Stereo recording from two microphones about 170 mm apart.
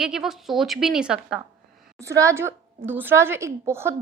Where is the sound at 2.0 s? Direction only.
20° right (ahead or behind).